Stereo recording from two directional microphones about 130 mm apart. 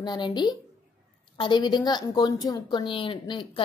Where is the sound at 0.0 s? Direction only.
35° left (ahead or behind).